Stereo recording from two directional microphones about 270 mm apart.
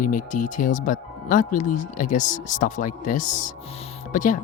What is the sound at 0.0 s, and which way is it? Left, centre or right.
Speech, left.